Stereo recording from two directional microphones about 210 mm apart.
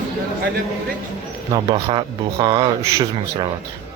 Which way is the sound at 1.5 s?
20° right (ahead or behind).